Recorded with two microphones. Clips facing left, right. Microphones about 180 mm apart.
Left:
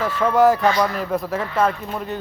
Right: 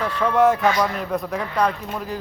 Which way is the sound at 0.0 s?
5° left (ahead or behind).